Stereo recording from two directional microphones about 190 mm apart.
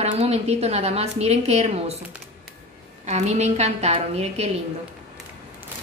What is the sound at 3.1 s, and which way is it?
A woman's voice, 35° right (ahead or behind).